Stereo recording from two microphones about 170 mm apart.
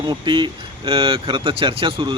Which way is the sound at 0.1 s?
30° right (ahead or behind).